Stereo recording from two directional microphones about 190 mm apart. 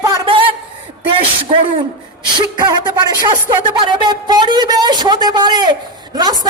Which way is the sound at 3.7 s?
25° right (ahead or behind).